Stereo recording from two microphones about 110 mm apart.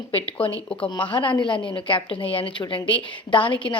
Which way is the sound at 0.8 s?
50° left (ahead or behind).